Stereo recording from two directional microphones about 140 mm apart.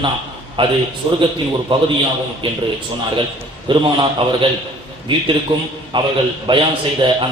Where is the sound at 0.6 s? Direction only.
35° right (ahead or behind).